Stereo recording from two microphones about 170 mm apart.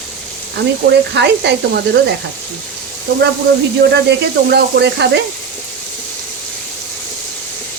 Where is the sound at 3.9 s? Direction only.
75° right (ahead or behind).